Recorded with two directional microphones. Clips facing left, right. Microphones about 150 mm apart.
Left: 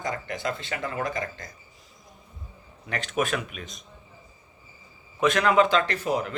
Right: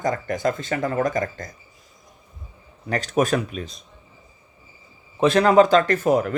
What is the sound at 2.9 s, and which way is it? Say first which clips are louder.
Speech: right 6 dB; 40° right (ahead or behind).